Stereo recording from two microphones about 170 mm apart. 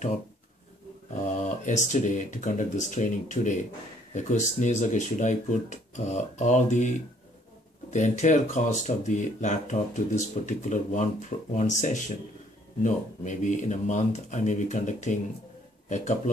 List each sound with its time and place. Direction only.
1.4 s speech: 45° left (ahead or behind)
7.9 s speech: 45° left (ahead or behind)